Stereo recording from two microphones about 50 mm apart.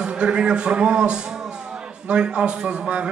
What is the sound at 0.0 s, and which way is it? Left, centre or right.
A man's voice, right.